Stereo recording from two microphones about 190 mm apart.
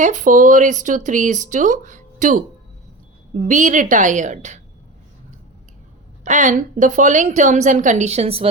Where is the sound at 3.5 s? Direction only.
40° right (ahead or behind).